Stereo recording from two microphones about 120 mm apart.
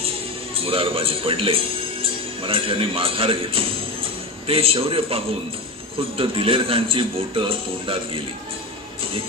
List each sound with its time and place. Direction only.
0.6 s a man's voice: 50° right (ahead or behind)